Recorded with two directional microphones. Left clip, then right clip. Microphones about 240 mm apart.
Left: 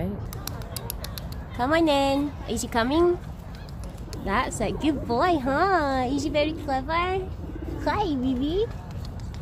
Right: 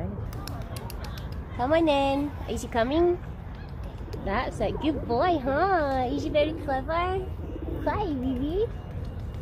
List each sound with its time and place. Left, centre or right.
1.6 s a woman's voice: left
4.3 s a woman's voice: left